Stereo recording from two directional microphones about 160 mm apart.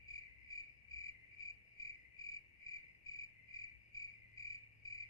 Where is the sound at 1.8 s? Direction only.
25° left (ahead or behind).